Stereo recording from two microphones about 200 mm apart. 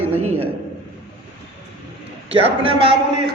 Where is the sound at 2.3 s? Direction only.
30° right (ahead or behind).